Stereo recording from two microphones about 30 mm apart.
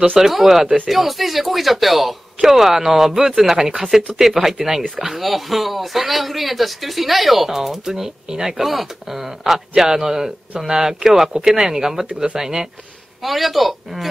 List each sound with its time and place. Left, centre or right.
0.2 s speech: centre
8.6 s speech: centre
13.2 s speech: centre